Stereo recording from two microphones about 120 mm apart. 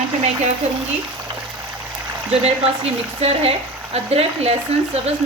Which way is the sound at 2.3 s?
60° right (ahead or behind).